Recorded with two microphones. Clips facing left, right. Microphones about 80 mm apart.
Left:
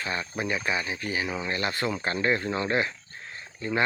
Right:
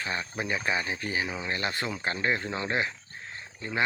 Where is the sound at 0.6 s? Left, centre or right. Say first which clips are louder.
Left 1 dB; right.